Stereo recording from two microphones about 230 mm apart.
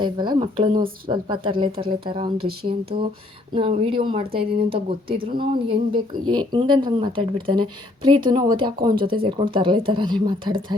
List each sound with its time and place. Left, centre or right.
0.0 s a woman's voice: centre